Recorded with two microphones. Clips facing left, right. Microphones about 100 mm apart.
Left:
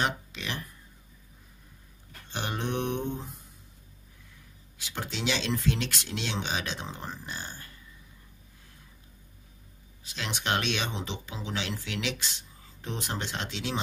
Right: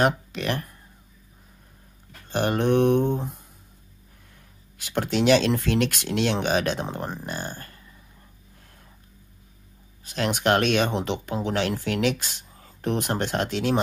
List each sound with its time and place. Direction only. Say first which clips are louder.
0.0 s speech: right 8 dB; 55° right (ahead or behind)
2.2 s speech: right 11 dB; 50° right (ahead or behind)
4.7 s speech: right 12 dB; 55° right (ahead or behind)
10.0 s speech: right 10 dB; 50° right (ahead or behind)